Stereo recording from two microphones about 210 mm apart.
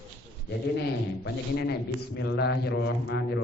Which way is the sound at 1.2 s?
50° left (ahead or behind).